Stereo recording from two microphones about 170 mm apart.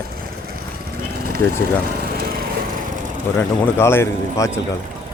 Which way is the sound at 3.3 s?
15° left (ahead or behind).